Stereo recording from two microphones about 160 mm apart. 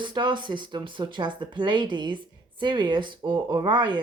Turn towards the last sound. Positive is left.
turn(degrees=-30)  # may be behind; listen again after turning